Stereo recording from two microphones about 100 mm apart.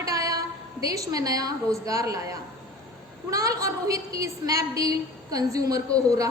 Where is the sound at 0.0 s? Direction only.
35° right (ahead or behind).